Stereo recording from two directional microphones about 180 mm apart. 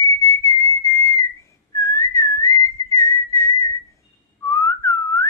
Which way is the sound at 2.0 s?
15° left (ahead or behind).